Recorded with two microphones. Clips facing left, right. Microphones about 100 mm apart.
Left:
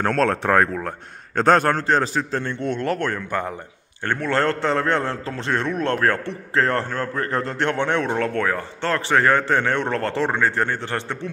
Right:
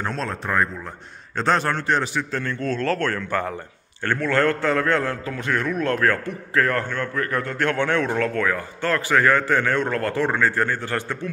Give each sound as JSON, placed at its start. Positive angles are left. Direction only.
{"t": 0.0, "sound": "speech", "side_deg": 60}
{"t": 1.3, "sound": "a man's voice", "side_deg": 50}